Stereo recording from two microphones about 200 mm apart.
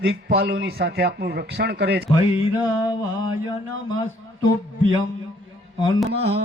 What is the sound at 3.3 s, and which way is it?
Mantra, 90° right.